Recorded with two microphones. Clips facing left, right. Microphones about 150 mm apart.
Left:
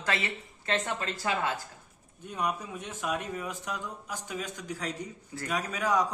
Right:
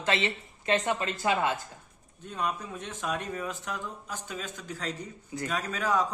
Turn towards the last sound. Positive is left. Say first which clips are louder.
# even
turn(degrees=15)  # may be behind; listen again after turning